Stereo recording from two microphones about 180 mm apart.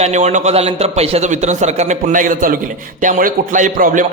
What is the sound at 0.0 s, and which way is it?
A man's voice, 40° right (ahead or behind).